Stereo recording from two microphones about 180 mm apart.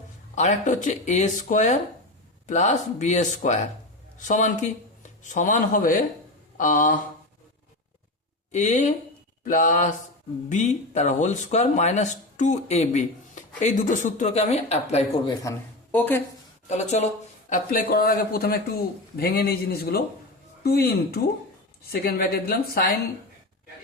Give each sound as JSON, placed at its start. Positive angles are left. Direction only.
{"t": 0.3, "sound": "speech", "side_deg": 40}
{"t": 8.5, "sound": "speech", "side_deg": 40}
{"t": 15.3, "sound": "speech", "side_deg": 15}
{"t": 16.6, "sound": "speech", "side_deg": 40}
{"t": 17.5, "sound": "a man's voice", "side_deg": 55}